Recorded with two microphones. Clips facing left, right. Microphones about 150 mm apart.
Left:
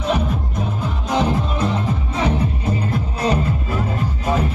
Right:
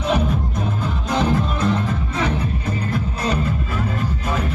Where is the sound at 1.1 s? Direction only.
20° left (ahead or behind).